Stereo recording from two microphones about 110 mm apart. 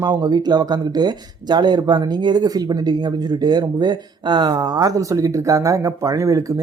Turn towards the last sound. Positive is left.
turn(degrees=-30)  # may be behind; listen again after turning